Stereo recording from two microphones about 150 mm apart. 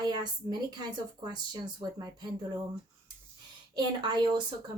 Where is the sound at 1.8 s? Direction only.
25° right (ahead or behind).